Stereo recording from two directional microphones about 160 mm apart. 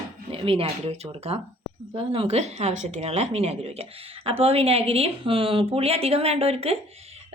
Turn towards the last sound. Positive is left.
turn(degrees=-40)  # may be behind; listen again after turning